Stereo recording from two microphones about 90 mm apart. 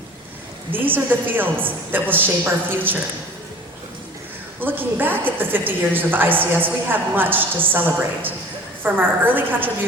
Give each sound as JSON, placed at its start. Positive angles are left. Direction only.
{"t": 0.7, "sound": "a woman's voice", "side_deg": -20}
{"t": 4.6, "sound": "a woman's voice", "side_deg": -20}